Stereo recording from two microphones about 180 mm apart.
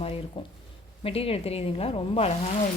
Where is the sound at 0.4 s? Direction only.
30° left (ahead or behind).